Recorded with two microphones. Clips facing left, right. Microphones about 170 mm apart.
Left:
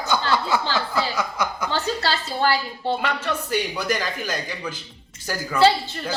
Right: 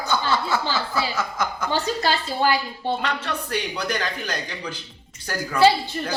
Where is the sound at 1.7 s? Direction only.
15° right (ahead or behind).